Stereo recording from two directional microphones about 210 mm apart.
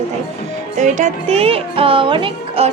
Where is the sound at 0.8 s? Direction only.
35° right (ahead or behind).